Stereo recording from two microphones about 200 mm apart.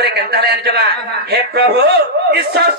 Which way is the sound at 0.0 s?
50° right (ahead or behind).